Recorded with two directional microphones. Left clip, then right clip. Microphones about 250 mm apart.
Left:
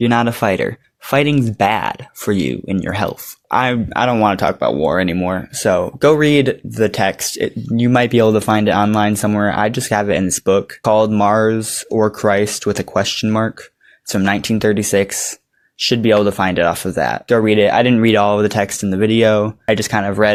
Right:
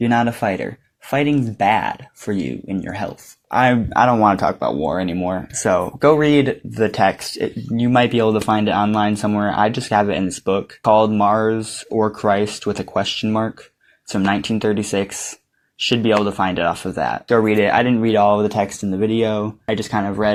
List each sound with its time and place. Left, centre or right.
0.0 s speech: left
5.5 s speech: left